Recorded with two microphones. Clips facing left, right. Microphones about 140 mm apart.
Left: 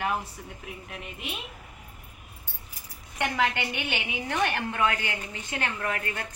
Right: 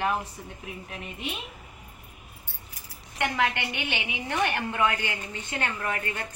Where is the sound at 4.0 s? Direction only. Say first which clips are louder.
Even; 15° right (ahead or behind).